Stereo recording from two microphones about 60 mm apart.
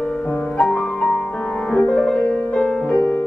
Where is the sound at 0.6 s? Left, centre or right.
Centre.